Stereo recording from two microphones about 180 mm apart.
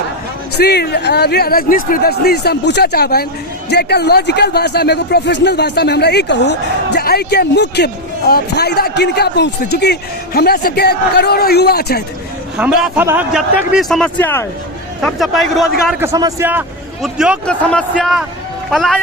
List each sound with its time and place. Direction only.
0.5 s a man's voice: 65° left (ahead or behind)
12.5 s a man's voice: 10° right (ahead or behind)
16.1 s a man's voice: 15° right (ahead or behind)
17.4 s a man's voice: 5° left (ahead or behind)